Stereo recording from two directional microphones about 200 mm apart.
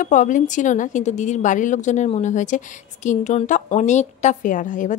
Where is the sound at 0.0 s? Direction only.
40° left (ahead or behind).